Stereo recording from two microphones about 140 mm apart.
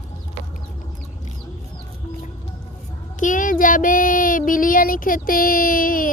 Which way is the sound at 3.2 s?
70° left (ahead or behind).